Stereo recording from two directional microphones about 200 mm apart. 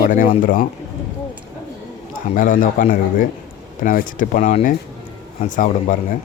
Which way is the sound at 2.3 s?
40° left (ahead or behind).